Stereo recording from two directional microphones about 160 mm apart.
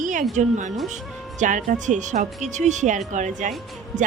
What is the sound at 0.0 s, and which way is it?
Music, 55° right (ahead or behind).